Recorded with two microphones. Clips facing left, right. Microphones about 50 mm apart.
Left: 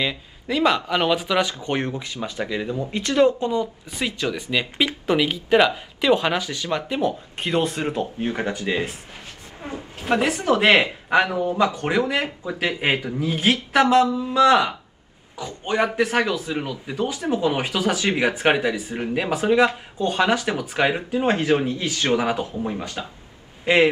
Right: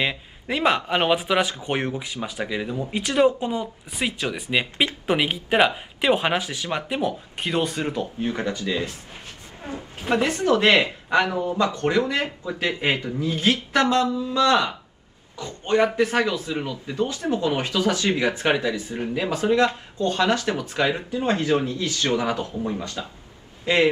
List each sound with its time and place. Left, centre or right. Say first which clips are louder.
0.0 s speech: even; right; by 2.9 s centre
2.9 s speech: left 1 dB; centre
7.3 s speech: left 1 dB; centre
7.7 s speech: left 1 dB; left
10.0 s a man's voice: left 1 dB; centre